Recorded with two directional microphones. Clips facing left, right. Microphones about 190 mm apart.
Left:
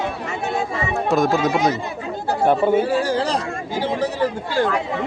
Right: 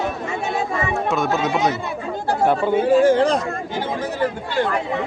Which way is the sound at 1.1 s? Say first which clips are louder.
Left 5 dB; 35° left (ahead or behind).